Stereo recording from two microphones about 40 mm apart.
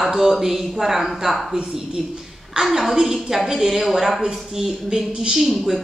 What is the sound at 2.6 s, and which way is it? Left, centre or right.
A woman's voice, centre.